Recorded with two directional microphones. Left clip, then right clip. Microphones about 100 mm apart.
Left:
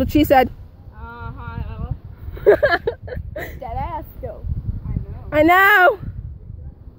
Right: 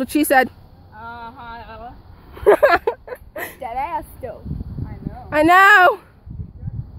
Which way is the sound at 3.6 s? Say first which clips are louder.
Right 4 dB; 15° left (ahead or behind).